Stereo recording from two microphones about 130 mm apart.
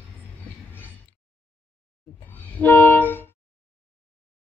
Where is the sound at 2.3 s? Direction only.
15° left (ahead or behind).